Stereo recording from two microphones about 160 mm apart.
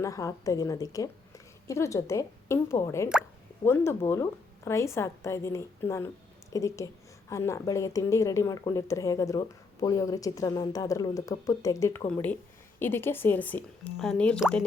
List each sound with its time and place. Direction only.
0.0 s a woman's voice: 20° left (ahead or behind); by 14.4 s 5° left (ahead or behind)